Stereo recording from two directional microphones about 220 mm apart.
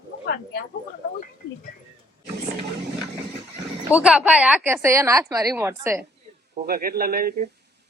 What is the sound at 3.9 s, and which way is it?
A woman's voice, 5° right (ahead or behind).